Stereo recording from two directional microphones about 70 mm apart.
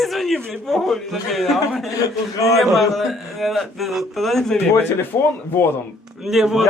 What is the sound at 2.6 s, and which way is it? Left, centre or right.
A man's voice, centre.